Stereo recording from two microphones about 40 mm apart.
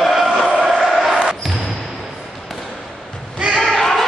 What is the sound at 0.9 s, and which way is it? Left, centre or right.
Basketball bounce, centre.